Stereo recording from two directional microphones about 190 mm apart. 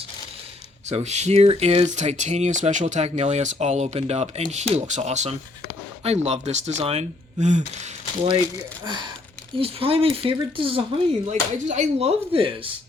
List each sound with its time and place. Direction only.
0.9 s speech: 35° right (ahead or behind)
8.8 s speech: 25° right (ahead or behind)